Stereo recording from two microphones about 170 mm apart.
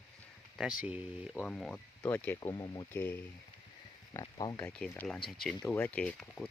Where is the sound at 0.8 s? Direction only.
5° right (ahead or behind).